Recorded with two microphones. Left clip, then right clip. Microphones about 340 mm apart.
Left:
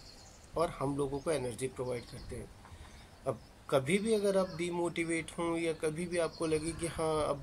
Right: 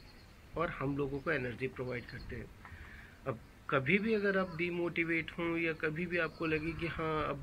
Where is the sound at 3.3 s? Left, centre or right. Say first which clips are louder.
Left 3 dB; centre.